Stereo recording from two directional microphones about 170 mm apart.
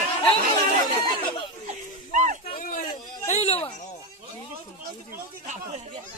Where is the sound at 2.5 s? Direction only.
50° left (ahead or behind).